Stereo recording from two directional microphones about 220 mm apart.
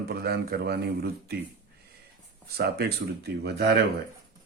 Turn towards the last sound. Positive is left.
turn(degrees=-45)  # may be behind; listen again after turning